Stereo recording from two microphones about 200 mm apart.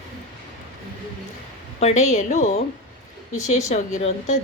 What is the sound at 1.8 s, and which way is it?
Speech, 35° left (ahead or behind).